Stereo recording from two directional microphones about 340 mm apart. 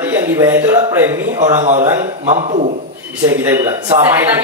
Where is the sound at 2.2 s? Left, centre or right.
Right.